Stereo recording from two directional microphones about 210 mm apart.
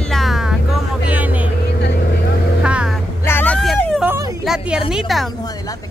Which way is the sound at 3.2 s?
10° left (ahead or behind).